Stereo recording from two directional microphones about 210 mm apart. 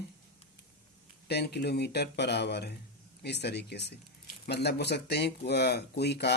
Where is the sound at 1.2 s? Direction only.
50° left (ahead or behind).